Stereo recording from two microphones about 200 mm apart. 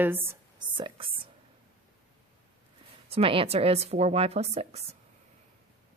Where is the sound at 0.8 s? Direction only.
25° right (ahead or behind).